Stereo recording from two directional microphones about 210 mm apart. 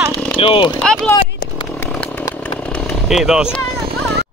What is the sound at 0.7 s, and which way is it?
Run, 5° left (ahead or behind).